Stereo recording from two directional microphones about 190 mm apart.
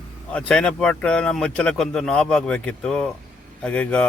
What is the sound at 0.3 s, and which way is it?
A man's voice, 5° left (ahead or behind).